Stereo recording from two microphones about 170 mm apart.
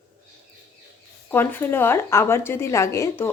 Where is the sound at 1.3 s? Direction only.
10° left (ahead or behind).